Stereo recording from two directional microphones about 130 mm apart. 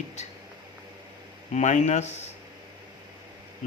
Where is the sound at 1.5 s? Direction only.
65° left (ahead or behind).